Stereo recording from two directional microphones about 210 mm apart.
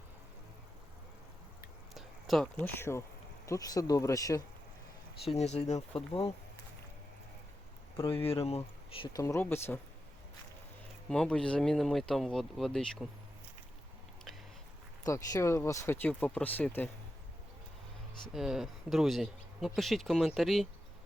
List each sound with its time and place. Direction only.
2.0 s speech: centre (ahead or behind); by 4.4 s 15° left (ahead or behind)
5.2 s speech: 30° left (ahead or behind)
7.9 s speech: 15° left (ahead or behind)
8.2 s speech: 30° left (ahead or behind); by 9.8 s 10° left (ahead or behind)
11.1 s speech: 5° left (ahead or behind)
15.0 s speech: 15° left (ahead or behind)
18.3 s speech: centre (ahead or behind)